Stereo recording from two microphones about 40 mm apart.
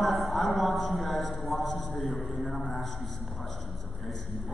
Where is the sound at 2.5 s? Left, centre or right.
Left.